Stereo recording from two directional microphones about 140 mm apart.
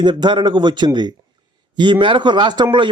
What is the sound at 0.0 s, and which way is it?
A man's voice, 30° right (ahead or behind).